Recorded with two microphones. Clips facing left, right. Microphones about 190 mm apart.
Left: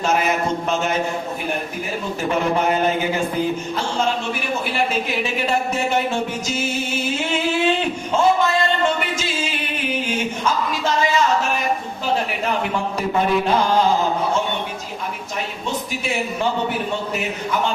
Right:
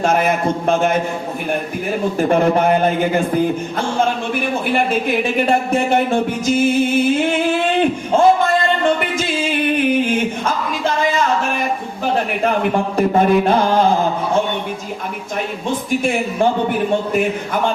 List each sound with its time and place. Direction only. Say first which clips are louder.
0.0 s speech: right 4 dB; 50° right (ahead or behind)
2.1 s speech: right 5 dB; 50° right (ahead or behind)
9.1 s music: right 6 dB; 55° right (ahead or behind)
12.5 s speech: right 6 dB; 50° right (ahead or behind)
15.7 s speech: right 8 dB; 50° right (ahead or behind)